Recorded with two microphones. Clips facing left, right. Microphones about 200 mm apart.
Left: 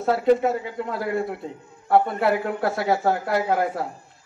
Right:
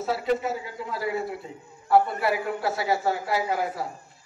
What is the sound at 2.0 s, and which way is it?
Speech, 55° left (ahead or behind).